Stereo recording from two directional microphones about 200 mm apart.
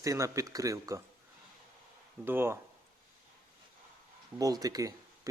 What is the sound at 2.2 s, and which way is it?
Speech, 10° right (ahead or behind).